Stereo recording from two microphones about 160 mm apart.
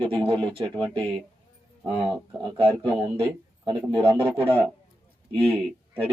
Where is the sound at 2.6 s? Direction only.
35° right (ahead or behind).